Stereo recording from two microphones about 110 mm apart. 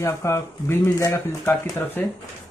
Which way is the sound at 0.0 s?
25° left (ahead or behind).